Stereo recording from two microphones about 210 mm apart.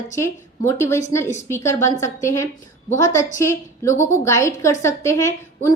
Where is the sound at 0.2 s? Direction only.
15° left (ahead or behind).